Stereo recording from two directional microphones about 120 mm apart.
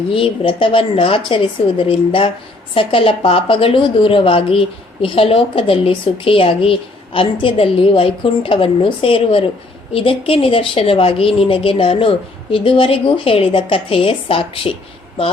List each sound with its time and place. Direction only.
0.1 s a woman's voice: 50° left (ahead or behind)